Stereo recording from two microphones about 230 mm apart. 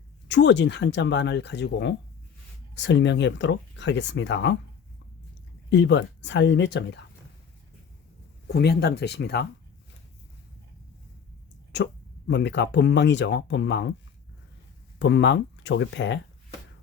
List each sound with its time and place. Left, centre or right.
0.3 s speech: left
5.7 s speech: left
8.4 s speech: left
12.3 s speech: left
14.9 s speech: left